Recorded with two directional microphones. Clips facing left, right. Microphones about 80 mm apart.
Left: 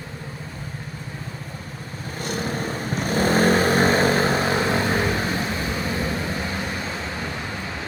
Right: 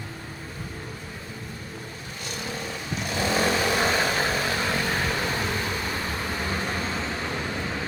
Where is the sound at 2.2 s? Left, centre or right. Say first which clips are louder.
Left 7 dB; left.